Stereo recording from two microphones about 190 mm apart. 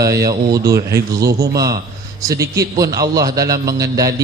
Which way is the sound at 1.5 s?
20° right (ahead or behind).